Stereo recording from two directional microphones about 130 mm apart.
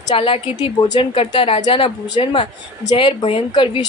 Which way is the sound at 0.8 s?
35° left (ahead or behind).